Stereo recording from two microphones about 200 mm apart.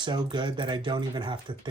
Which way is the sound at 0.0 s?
20° right (ahead or behind).